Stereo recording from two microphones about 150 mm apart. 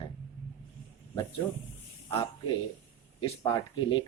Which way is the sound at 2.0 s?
35° left (ahead or behind).